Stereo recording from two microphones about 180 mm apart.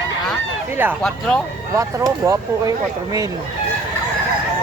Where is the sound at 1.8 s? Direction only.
15° right (ahead or behind).